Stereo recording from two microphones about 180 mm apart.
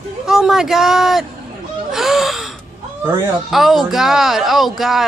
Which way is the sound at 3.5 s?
Centre (ahead or behind).